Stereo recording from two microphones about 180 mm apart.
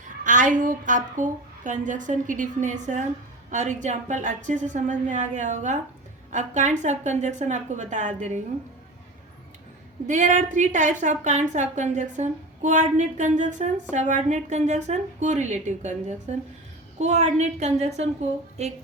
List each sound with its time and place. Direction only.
0.3 s a woman's voice: 45° right (ahead or behind)
10.1 s a woman's voice: 45° right (ahead or behind)